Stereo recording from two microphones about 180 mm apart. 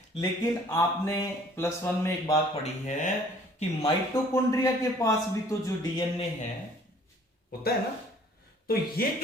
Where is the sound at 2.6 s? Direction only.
40° left (ahead or behind).